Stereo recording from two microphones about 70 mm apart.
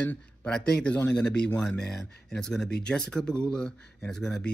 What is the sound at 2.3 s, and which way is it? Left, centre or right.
Speech, centre.